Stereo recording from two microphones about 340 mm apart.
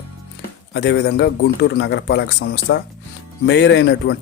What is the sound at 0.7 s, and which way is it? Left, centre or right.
A man's voice, left.